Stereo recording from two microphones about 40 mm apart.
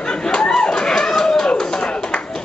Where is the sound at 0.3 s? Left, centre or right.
Centre.